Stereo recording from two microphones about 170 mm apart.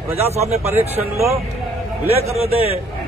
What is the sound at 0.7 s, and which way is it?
Speech, 15° right (ahead or behind).